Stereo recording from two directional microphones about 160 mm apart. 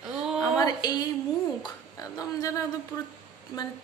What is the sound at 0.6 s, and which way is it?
Speech, 25° left (ahead or behind).